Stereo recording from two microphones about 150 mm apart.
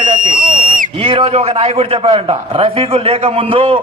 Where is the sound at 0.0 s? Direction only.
65° right (ahead or behind).